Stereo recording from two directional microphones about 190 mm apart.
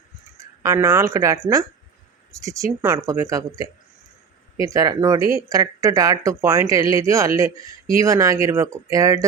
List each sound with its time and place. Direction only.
0.3 s speech: 15° right (ahead or behind)
2.4 s speech: 15° right (ahead or behind)